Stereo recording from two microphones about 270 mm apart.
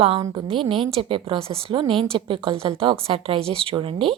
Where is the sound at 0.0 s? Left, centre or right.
Centre.